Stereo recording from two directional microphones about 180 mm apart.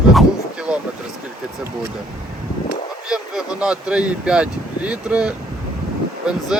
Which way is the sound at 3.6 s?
5° right (ahead or behind).